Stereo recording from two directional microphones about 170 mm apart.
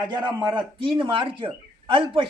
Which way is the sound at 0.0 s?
25° right (ahead or behind).